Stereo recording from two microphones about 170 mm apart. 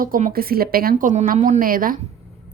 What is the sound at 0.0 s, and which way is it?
Speech, 55° right (ahead or behind).